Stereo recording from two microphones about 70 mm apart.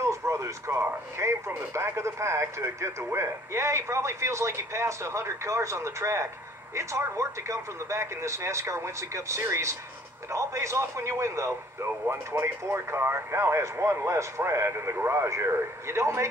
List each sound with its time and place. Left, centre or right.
0.0 s speech: right